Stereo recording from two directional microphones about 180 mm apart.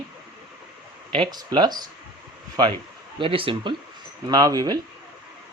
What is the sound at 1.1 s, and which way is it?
Speech, 25° right (ahead or behind).